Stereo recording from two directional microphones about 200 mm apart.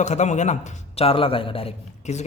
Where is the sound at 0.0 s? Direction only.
35° left (ahead or behind).